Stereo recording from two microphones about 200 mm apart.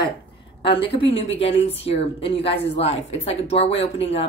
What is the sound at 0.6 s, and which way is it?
A woman's voice, 25° left (ahead or behind).